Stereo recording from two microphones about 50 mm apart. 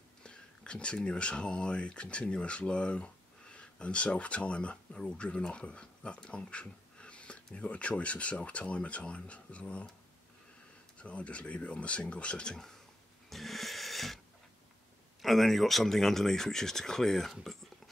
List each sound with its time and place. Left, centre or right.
0.2 s speech: centre
11.0 s speech: left
13.3 s a sound: centre
15.2 s speech: centre